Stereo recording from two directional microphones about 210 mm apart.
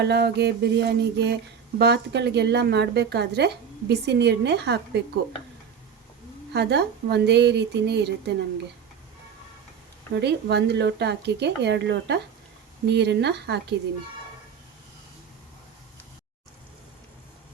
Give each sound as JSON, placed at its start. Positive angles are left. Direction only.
{"t": 0.0, "sound": "speech", "side_deg": -50}
{"t": 6.5, "sound": "speech", "side_deg": -55}
{"t": 10.2, "sound": "speech", "side_deg": -55}